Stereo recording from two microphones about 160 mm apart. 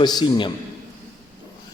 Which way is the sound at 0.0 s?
25° left (ahead or behind).